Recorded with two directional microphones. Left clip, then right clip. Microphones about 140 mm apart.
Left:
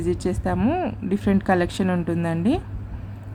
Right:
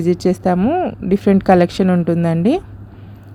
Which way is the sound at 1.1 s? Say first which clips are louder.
Right 10 dB; 45° right (ahead or behind).